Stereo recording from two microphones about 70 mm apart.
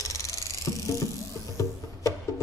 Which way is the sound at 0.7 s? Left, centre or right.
Left.